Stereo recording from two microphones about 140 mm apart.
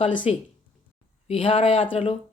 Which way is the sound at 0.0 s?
35° left (ahead or behind).